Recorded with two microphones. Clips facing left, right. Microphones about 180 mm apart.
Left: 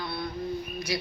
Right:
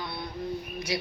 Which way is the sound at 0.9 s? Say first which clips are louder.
Even; 20° right (ahead or behind).